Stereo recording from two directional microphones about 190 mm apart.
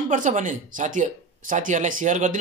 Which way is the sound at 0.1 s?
40° right (ahead or behind).